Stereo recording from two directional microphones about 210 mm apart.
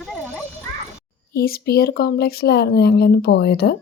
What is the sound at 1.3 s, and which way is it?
A woman's voice, 45° left (ahead or behind).